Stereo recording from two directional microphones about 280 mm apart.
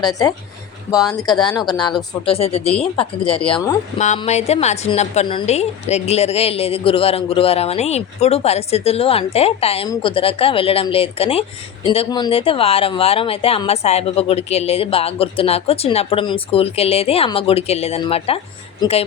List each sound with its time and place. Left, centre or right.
0.0 s a woman's voice: centre